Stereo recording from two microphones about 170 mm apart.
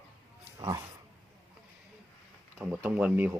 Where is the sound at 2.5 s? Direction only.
5° right (ahead or behind).